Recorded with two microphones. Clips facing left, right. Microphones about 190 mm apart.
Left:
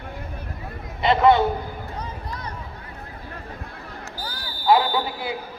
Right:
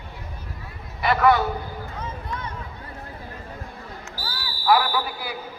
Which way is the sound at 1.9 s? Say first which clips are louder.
Right 1 dB; 35° left (ahead or behind).